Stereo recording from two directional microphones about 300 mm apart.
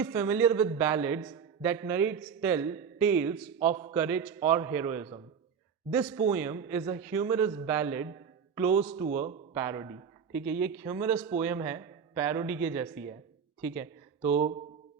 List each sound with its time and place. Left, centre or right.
0.0 s a man's voice: centre
8.8 s a man's voice: right
9.6 s a man's voice: centre
13.6 s a sound: centre
14.3 s a man's voice: right